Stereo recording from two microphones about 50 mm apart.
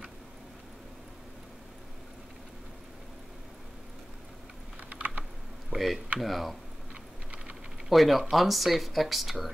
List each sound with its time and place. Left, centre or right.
4.8 s typing: right
5.7 s speech: centre
7.9 s speech: centre